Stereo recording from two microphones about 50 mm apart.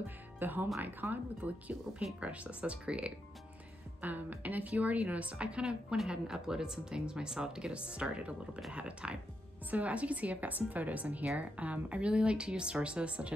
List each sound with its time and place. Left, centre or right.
0.4 s a woman's voice: right
4.0 s a woman's voice: right